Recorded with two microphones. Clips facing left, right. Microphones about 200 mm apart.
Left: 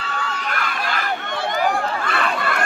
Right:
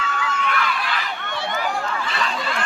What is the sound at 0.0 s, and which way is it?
Crowd, 35° left (ahead or behind).